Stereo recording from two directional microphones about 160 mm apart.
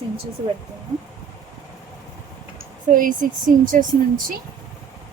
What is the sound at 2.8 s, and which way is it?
Speech, 55° right (ahead or behind).